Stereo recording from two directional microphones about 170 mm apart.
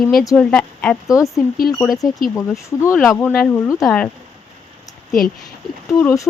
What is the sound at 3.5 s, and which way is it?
Speech, 10° left (ahead or behind).